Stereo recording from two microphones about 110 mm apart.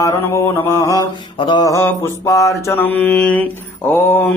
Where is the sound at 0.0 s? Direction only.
25° left (ahead or behind).